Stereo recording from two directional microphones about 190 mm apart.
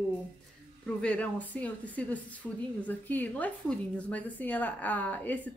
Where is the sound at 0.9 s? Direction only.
5° left (ahead or behind).